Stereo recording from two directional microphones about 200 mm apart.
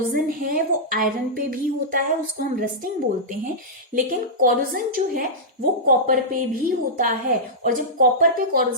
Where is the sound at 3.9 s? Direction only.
45° right (ahead or behind).